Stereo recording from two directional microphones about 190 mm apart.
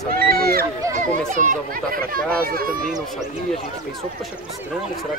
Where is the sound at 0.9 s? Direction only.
40° right (ahead or behind).